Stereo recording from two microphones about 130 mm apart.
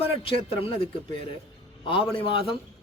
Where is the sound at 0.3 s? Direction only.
45° left (ahead or behind).